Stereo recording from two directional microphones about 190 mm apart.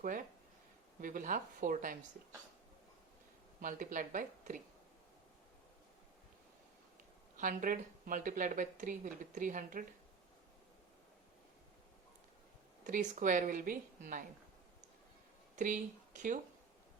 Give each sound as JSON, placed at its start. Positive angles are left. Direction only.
{"t": 0.0, "sound": "a woman's voice", "side_deg": -45}
{"t": 3.6, "sound": "a woman's voice", "side_deg": -45}
{"t": 7.3, "sound": "a woman's voice", "side_deg": -45}
{"t": 12.8, "sound": "a woman's voice", "side_deg": -40}
{"t": 15.5, "sound": "speech", "side_deg": -45}